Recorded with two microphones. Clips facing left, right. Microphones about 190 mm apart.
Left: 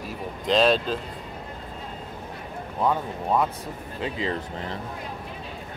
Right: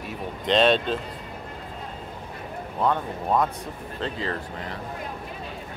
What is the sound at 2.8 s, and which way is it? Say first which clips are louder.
Speech: even; 5° left (ahead or behind).